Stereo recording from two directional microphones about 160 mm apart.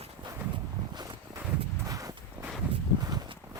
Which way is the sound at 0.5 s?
25° right (ahead or behind).